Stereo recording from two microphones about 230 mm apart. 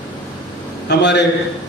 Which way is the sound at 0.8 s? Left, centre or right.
Left.